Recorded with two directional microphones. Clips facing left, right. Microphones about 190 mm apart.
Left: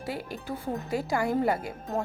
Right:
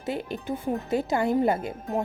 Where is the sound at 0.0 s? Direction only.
20° right (ahead or behind).